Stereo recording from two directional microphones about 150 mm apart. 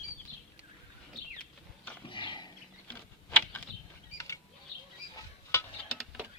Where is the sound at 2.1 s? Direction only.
35° left (ahead or behind).